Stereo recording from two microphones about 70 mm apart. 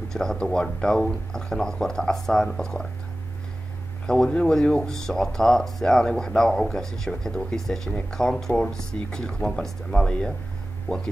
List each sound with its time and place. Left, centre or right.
0.1 s speech: centre
4.0 s speech: centre